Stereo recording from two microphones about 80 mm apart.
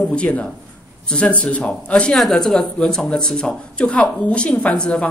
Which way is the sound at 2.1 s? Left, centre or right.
Centre.